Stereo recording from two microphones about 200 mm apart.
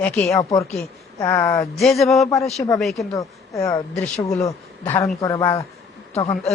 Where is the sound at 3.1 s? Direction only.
15° left (ahead or behind).